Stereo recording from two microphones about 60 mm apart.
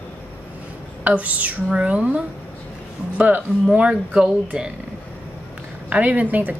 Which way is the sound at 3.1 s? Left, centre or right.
Right.